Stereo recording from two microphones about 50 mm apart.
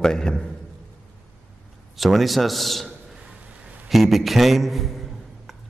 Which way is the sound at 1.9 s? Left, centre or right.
Centre.